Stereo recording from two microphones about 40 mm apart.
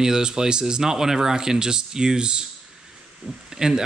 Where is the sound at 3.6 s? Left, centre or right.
Centre.